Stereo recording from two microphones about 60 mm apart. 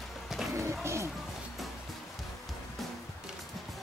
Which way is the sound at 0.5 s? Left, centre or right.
Right.